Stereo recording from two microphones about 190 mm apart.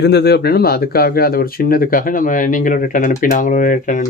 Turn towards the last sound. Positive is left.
turn(degrees=45)  # may be behind; listen again after turning